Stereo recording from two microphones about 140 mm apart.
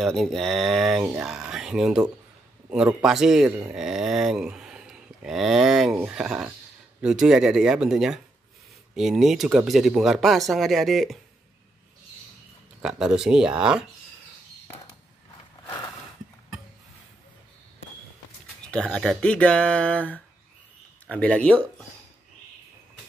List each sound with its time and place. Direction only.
0.0 s speech: centre (ahead or behind)
3.7 s a sound: 5° right (ahead or behind)
7.0 s speech: 5° right (ahead or behind)
12.8 s speech: 5° right (ahead or behind)
18.7 s speech: 5° left (ahead or behind)